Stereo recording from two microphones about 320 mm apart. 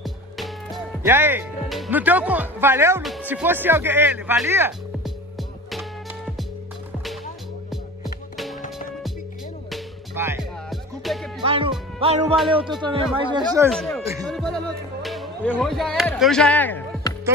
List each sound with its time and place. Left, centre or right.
0.0 s speech: centre
7.7 s music: centre
9.7 s music: centre
11.4 s speech: centre
13.7 s speech: centre
14.3 s music: centre